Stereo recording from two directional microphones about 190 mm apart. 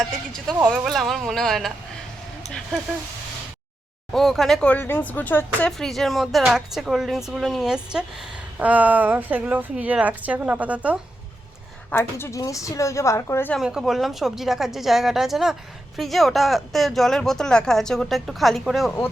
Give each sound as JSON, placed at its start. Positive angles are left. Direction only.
{"t": 0.7, "sound": "speech", "side_deg": 0}
{"t": 4.1, "sound": "a woman's voice", "side_deg": 0}
{"t": 11.9, "sound": "a woman's voice", "side_deg": 10}
{"t": 13.6, "sound": "speech", "side_deg": -5}